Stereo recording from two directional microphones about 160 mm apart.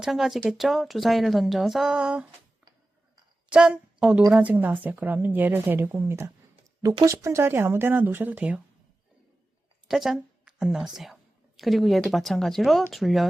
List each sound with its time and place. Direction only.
0.0 s speech: centre (ahead or behind)
3.5 s a woman's voice: 5° right (ahead or behind)
9.9 s a woman's voice: centre (ahead or behind)